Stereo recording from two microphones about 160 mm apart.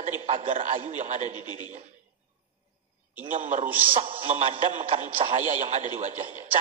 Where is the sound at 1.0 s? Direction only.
50° right (ahead or behind).